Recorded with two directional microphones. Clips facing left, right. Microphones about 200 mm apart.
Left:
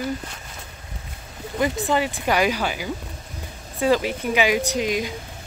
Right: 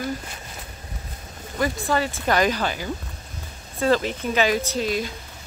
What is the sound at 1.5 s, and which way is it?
Speech, 20° left (ahead or behind).